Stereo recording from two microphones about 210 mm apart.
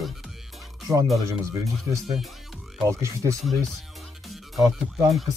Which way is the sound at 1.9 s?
15° right (ahead or behind).